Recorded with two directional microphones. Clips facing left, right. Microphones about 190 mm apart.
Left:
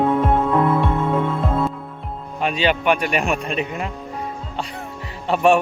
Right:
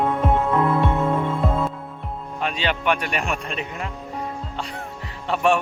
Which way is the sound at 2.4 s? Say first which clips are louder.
Left 5 dB; 10° left (ahead or behind).